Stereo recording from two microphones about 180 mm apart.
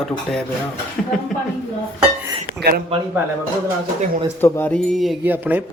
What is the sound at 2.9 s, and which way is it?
Speech, 35° right (ahead or behind).